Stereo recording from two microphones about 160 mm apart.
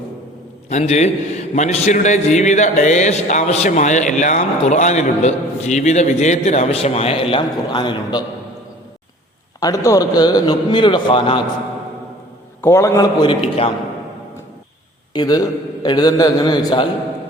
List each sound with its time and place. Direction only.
0.7 s a man's voice: 45° left (ahead or behind); by 8.2 s 30° left (ahead or behind)
9.6 s a man's voice: 20° left (ahead or behind)
12.6 s a man's voice: 15° left (ahead or behind)
13.2 s a man's voice: 40° left (ahead or behind)
15.1 s a man's voice: 25° left (ahead or behind)